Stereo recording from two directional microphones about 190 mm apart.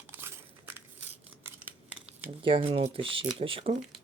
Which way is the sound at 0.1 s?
10° right (ahead or behind).